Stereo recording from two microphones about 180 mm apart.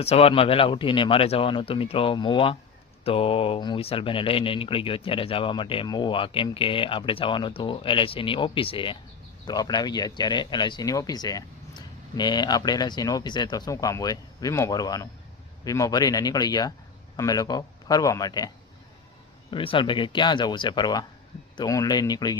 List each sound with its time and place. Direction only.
0.0 s speech: 35° left (ahead or behind)